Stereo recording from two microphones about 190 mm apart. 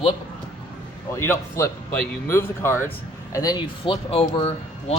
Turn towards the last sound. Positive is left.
turn(degrees=30)  # may be behind; listen again after turning